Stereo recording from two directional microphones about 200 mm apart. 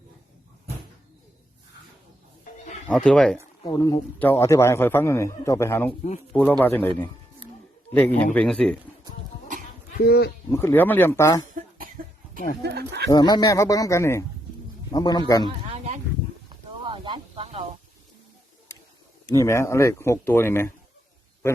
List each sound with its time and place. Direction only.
2.8 s speech: 5° left (ahead or behind)
3.6 s a man's voice: 20° left (ahead or behind)
7.9 s a man's voice: 10° left (ahead or behind)
10.0 s speech: 55° left (ahead or behind)
10.5 s a man's voice: 15° left (ahead or behind)
12.6 s speech: 55° right (ahead or behind)
13.1 s a man's voice: 20° left (ahead or behind)
15.4 s a sound: 30° right (ahead or behind)
16.8 s snake: 25° right (ahead or behind)
19.3 s a man's voice: 15° left (ahead or behind)